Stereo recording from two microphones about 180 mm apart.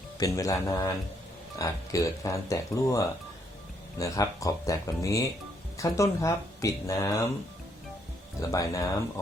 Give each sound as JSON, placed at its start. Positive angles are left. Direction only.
{"t": 0.2, "sound": "speech", "side_deg": 20}
{"t": 8.4, "sound": "speech", "side_deg": 20}